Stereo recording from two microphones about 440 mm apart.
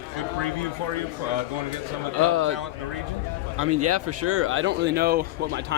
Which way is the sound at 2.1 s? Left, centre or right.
Right.